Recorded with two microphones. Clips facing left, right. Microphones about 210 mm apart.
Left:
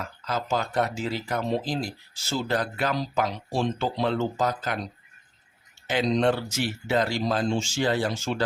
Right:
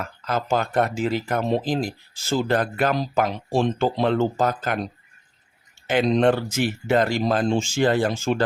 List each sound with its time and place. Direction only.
0.0 s speech: 55° right (ahead or behind)
5.9 s speech: 55° right (ahead or behind)